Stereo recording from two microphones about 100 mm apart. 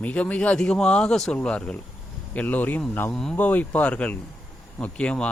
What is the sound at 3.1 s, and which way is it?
Speech, 5° left (ahead or behind).